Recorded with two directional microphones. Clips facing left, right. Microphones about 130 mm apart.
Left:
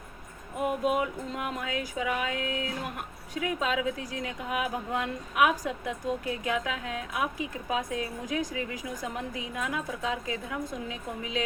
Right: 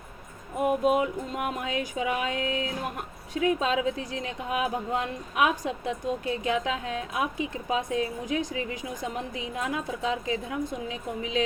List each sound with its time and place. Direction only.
0.9 s a woman's voice: 25° right (ahead or behind)